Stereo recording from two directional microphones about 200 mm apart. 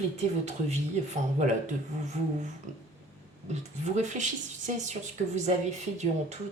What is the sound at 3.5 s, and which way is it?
Speech, 35° right (ahead or behind).